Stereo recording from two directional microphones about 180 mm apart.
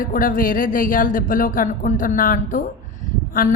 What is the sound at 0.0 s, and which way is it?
Speech, 50° left (ahead or behind).